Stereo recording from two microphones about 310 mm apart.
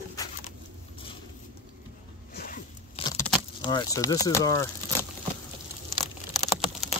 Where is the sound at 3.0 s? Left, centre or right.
Centre.